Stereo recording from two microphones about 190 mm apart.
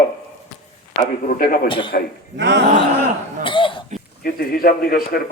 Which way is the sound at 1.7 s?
25° left (ahead or behind).